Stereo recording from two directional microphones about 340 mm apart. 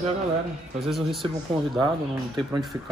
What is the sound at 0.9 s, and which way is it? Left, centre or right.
Speech, centre.